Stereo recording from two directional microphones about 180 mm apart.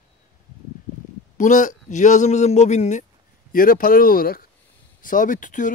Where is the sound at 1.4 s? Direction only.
45° left (ahead or behind).